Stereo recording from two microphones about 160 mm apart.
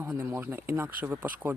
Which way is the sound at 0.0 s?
15° right (ahead or behind).